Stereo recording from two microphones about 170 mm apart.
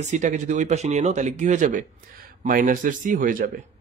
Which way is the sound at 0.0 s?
45° right (ahead or behind).